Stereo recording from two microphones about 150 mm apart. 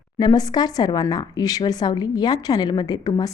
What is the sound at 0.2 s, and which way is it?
A woman's voice, 25° left (ahead or behind).